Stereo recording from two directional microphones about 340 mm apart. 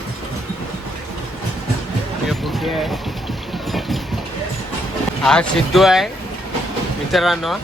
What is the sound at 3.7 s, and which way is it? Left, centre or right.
Train, centre.